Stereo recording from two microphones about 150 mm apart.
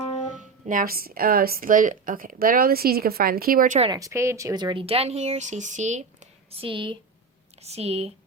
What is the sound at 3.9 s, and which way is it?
A woman's voice, 20° right (ahead or behind).